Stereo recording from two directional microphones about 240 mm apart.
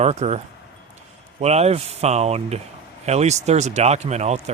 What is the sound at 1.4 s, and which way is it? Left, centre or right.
Speech, right.